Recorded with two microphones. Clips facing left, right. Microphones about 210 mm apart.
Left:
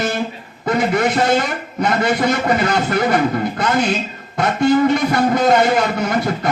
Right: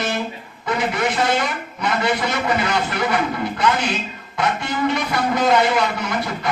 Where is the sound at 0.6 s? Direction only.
45° left (ahead or behind).